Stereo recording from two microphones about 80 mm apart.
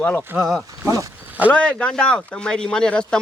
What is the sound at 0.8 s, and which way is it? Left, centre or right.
Speech, right.